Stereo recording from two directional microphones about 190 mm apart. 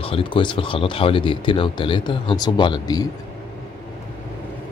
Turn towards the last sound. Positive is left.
turn(degrees=20)  # may be behind; listen again after turning